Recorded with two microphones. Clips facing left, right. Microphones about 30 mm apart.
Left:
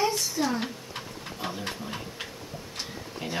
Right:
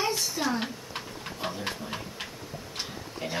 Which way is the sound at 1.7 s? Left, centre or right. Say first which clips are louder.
Right 1 dB; centre.